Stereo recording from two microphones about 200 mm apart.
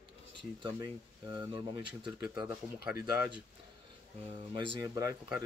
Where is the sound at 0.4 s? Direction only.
25° right (ahead or behind).